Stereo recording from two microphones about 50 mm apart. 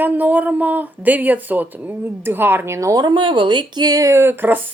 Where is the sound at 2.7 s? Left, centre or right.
Right.